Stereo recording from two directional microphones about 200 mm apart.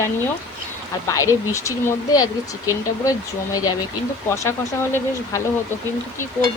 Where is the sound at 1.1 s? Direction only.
15° left (ahead or behind).